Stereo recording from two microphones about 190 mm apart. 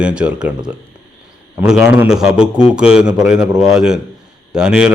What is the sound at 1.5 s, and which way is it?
A man's voice, 5° right (ahead or behind).